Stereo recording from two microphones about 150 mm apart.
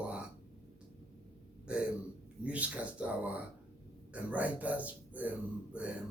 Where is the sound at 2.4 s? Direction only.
10° right (ahead or behind).